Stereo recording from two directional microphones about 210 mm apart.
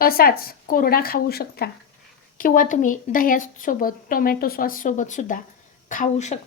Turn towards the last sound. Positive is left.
turn(degrees=35)  # may be behind; listen again after turning